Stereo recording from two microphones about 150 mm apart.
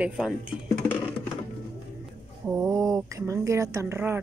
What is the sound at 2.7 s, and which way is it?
Speech, 20° right (ahead or behind).